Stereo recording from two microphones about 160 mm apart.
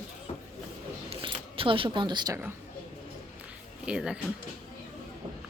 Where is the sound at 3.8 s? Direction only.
5° right (ahead or behind).